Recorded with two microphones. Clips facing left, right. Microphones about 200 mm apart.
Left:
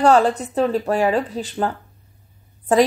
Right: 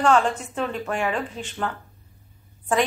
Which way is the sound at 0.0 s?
35° left (ahead or behind).